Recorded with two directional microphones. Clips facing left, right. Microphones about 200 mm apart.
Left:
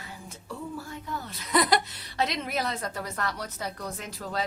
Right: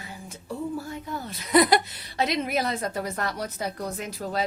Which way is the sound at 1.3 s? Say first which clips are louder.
Right 5 dB; 10° right (ahead or behind).